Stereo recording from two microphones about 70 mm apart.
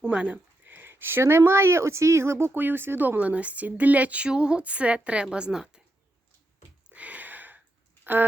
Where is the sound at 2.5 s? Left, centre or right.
Right; by 5.8 s centre.